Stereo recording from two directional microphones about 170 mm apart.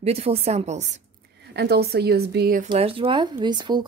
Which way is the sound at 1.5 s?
70° right (ahead or behind).